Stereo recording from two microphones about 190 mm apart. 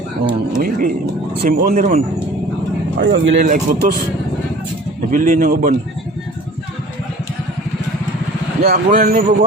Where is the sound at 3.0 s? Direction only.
75° right (ahead or behind).